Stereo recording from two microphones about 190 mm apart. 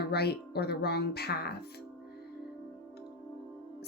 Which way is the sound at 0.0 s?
60° left (ahead or behind).